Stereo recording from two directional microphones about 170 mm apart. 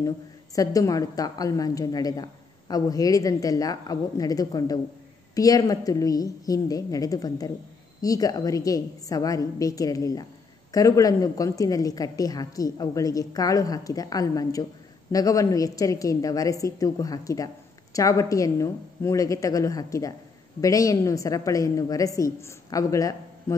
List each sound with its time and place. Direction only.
0.6 s a woman's voice: 20° left (ahead or behind)